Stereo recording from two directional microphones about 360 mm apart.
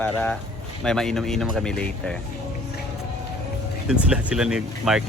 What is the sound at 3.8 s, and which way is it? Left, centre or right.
Speech, centre.